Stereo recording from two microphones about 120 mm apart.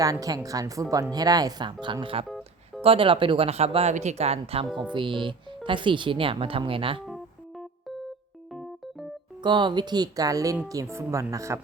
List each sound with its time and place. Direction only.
0.0 s a woman's voice: 30° right (ahead or behind); by 4.6 s 60° right (ahead or behind)
4.9 s speech: 45° right (ahead or behind)
9.4 s a woman's voice: 40° right (ahead or behind)